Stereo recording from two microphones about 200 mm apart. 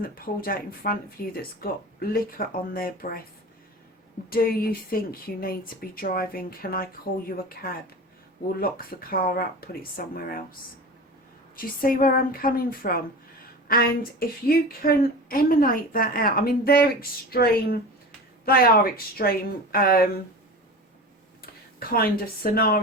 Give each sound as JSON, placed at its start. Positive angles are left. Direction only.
{"t": 0.0, "sound": "speech", "side_deg": 45}
{"t": 4.3, "sound": "speech", "side_deg": 50}
{"t": 11.5, "sound": "speech", "side_deg": 45}
{"t": 21.4, "sound": "speech", "side_deg": 50}